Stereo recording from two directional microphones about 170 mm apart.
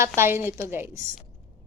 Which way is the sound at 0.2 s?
15° right (ahead or behind).